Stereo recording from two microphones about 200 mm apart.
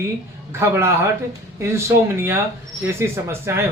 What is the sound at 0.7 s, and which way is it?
Speech, 10° right (ahead or behind).